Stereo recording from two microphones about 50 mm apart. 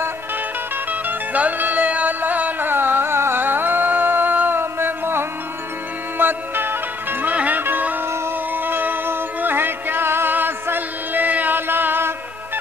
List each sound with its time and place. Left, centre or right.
1.0 s music: right
2.7 s music: right
4.6 s a sound: right
6.1 s music: right
7.3 s music: right